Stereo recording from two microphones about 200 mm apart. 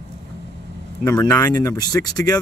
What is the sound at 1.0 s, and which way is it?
Speech, 15° left (ahead or behind).